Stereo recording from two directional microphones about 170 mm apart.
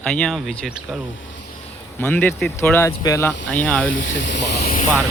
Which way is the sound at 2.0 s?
10° left (ahead or behind).